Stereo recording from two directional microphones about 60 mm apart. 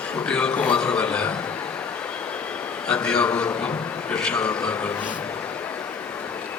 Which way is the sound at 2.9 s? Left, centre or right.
Centre.